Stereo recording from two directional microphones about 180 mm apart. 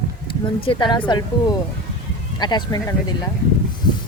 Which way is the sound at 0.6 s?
30° left (ahead or behind).